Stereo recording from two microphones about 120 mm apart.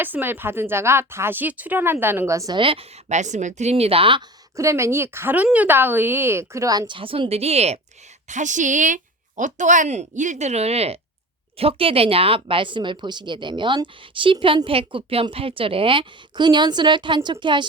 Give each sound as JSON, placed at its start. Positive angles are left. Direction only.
{"t": 0.0, "sound": "speech", "side_deg": -15}
{"t": 2.6, "sound": "speech", "side_deg": -50}
{"t": 3.1, "sound": "speech", "side_deg": -80}
{"t": 4.5, "sound": "speech", "side_deg": -25}
{"t": 8.3, "sound": "a woman's voice", "side_deg": -90}